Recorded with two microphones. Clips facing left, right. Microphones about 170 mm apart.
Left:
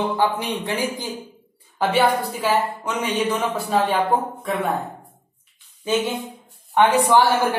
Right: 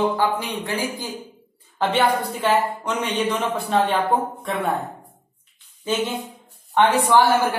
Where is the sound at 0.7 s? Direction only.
20° left (ahead or behind).